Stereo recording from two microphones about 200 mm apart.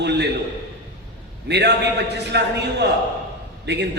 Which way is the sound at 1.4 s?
60° right (ahead or behind).